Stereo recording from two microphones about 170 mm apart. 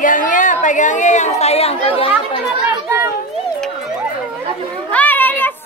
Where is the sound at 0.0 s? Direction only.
50° left (ahead or behind); by 2.1 s 35° left (ahead or behind).